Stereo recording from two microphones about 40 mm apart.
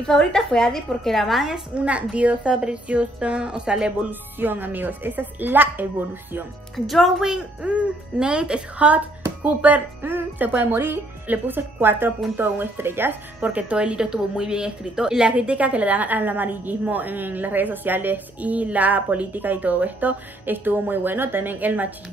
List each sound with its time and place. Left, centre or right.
0.0 s a woman's voice: centre
1.8 s a child's voice: right
4.0 s a woman's voice: right
6.9 s speech: centre
7.6 s a child's voice: right
10.4 s speech: right
13.4 s a child's voice: right
13.7 s a woman's voice: right